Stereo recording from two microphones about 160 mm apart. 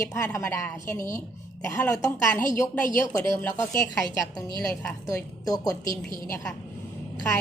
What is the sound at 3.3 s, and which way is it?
Speech, 15° left (ahead or behind).